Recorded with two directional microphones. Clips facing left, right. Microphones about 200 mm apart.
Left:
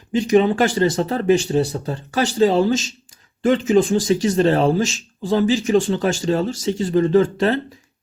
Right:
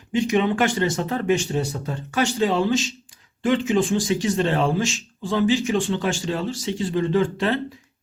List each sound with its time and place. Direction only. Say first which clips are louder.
0.1 s speech: left 5 dB; 35° left (ahead or behind)